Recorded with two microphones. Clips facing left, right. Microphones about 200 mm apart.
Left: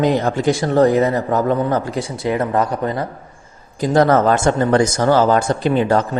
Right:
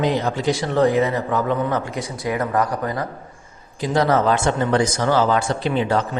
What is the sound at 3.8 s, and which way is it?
Speech, 50° left (ahead or behind).